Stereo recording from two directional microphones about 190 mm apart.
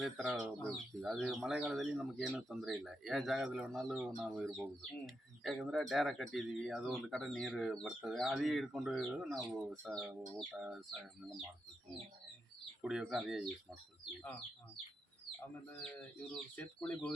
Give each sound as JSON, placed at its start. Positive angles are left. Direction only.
{"t": 0.0, "sound": "speech", "side_deg": -5}
{"t": 12.8, "sound": "speech", "side_deg": -5}
{"t": 15.7, "sound": "speech", "side_deg": 5}